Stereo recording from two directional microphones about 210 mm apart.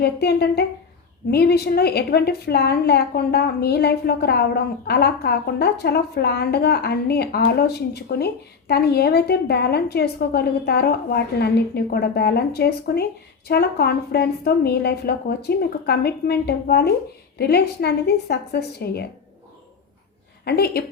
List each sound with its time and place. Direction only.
0.0 s a woman's voice: 50° left (ahead or behind)
20.4 s a woman's voice: 50° left (ahead or behind)